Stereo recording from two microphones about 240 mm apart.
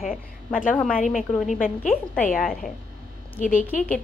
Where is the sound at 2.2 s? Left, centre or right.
Left.